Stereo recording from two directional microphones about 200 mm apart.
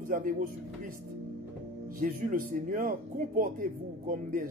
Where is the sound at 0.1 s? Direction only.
45° right (ahead or behind).